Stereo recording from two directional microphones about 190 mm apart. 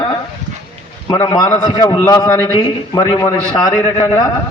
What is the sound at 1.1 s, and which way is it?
A man's voice, 20° left (ahead or behind).